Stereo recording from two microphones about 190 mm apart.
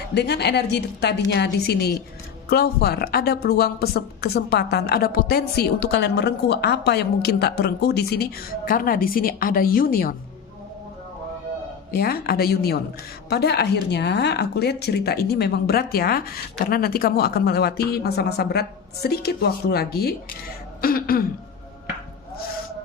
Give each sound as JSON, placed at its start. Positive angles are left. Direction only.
{"t": 0.1, "sound": "speech", "side_deg": 60}
{"t": 11.9, "sound": "a woman's voice", "side_deg": 55}